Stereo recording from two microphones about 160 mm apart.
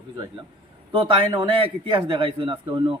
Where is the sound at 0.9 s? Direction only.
35° right (ahead or behind).